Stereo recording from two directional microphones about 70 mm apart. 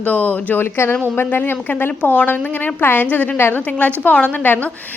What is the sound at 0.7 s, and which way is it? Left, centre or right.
A woman's voice, left.